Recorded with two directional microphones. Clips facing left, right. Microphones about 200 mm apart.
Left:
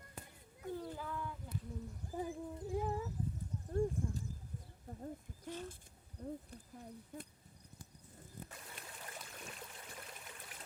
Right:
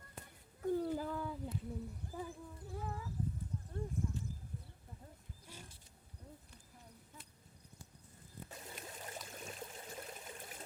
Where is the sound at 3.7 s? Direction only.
40° left (ahead or behind).